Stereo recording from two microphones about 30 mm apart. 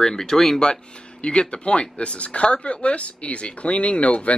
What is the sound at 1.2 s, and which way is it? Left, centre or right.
Speech, left.